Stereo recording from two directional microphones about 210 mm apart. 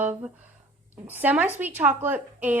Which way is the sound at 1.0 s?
10° right (ahead or behind).